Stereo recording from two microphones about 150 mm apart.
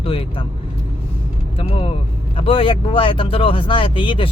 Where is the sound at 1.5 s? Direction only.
40° left (ahead or behind).